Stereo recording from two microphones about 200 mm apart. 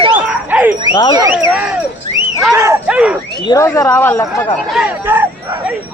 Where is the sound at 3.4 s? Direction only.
15° left (ahead or behind).